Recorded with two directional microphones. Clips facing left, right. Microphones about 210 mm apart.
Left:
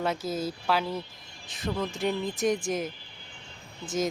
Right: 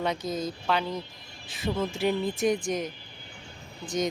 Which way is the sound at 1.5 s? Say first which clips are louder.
Right 2 dB; 5° right (ahead or behind).